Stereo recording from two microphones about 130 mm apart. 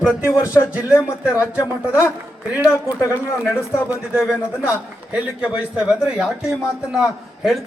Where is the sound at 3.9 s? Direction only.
10° right (ahead or behind).